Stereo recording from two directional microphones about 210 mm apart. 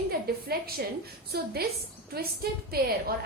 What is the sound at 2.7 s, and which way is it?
Speech, 45° right (ahead or behind).